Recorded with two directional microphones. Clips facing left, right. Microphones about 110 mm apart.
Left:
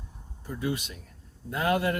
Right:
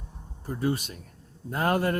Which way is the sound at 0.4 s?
40° right (ahead or behind).